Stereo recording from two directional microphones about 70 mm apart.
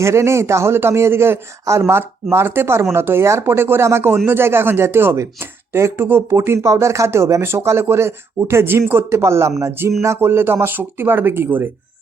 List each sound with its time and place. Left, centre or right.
0.0 s speech: right